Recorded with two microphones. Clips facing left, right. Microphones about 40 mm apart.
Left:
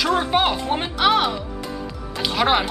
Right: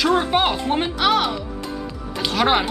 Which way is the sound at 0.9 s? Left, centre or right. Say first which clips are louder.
Left 4 dB; centre.